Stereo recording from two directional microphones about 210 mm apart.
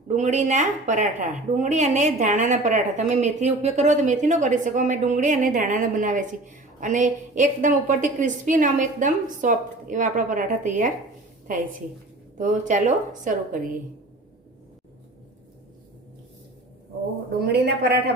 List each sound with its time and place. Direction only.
0.2 s a woman's voice: 35° right (ahead or behind)
12.4 s a woman's voice: 35° right (ahead or behind)
17.4 s a woman's voice: 50° right (ahead or behind)